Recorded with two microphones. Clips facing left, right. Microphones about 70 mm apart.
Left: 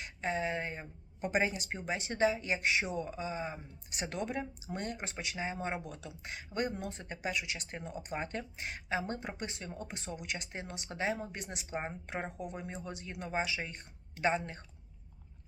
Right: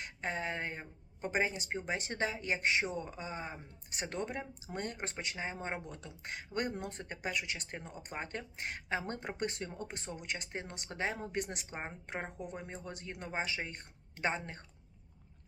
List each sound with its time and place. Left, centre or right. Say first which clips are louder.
0.0 s speech: left 3 dB; right
1.4 s speech: left 1 dB; right
11.7 s a woman's voice: left 4 dB; centre
12.0 s speech: left 2 dB; right